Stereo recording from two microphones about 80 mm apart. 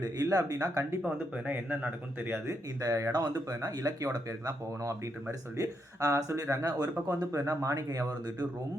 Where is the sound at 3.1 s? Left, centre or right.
Right.